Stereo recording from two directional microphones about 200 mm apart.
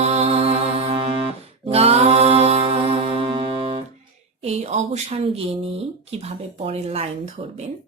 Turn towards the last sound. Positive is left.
turn(degrees=-30)  # may be behind; listen again after turning